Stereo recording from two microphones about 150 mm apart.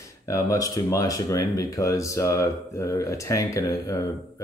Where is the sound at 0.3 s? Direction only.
20° left (ahead or behind).